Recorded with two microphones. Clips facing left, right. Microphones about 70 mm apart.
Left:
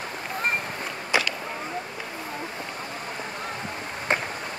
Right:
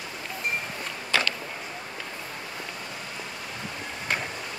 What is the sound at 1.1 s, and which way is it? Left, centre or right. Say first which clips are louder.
Vehicle: left 2 dB; centre.